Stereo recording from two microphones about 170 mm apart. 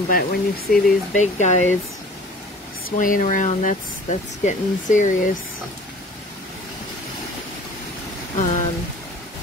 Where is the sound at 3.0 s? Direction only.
50° left (ahead or behind).